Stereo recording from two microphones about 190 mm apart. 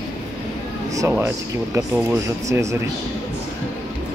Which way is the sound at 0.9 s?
15° right (ahead or behind).